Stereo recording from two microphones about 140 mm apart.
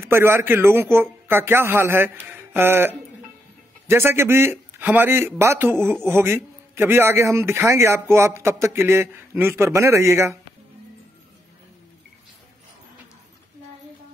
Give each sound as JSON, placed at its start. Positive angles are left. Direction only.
{"t": 0.0, "sound": "a man's voice", "side_deg": -15}